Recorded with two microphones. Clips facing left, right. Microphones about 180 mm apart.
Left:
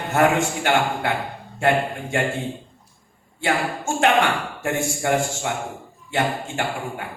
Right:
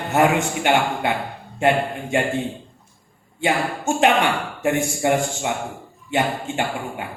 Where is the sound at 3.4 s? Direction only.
20° right (ahead or behind).